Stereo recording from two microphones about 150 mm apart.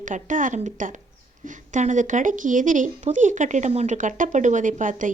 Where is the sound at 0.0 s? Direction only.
60° right (ahead or behind).